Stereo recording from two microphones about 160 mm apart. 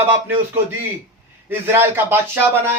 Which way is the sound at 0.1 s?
15° right (ahead or behind).